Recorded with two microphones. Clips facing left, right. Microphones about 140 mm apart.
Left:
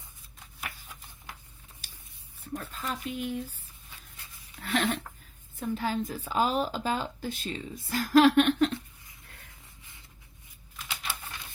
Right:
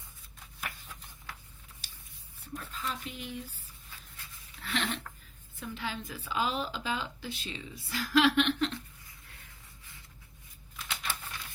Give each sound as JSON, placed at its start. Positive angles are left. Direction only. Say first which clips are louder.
{"t": 1.3, "sound": "a sound", "louder": "left 1 dB", "side_deg": 15}
{"t": 2.5, "sound": "speech", "louder": "left 3 dB", "side_deg": 50}
{"t": 4.6, "sound": "speech", "louder": "left 6 dB", "side_deg": 45}
{"t": 10.8, "sound": "crumpling", "louder": "even", "side_deg": 5}